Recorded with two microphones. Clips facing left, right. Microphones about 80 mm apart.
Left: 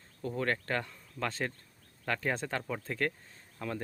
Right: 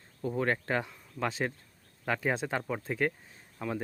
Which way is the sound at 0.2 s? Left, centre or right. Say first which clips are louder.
Right 3 dB; centre.